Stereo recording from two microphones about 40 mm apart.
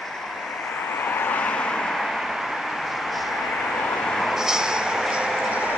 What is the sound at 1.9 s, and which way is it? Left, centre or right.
Vehicle, centre.